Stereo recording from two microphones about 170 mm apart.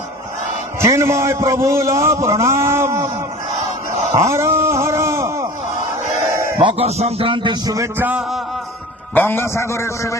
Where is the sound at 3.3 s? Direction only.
55° left (ahead or behind).